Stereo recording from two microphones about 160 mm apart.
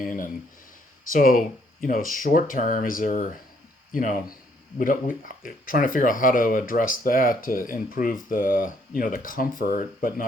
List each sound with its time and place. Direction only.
1.1 s speech: 60° left (ahead or behind)